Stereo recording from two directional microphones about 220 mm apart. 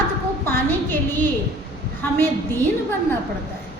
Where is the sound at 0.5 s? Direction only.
10° left (ahead or behind).